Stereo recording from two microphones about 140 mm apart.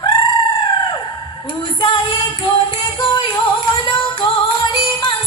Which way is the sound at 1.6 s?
35° left (ahead or behind).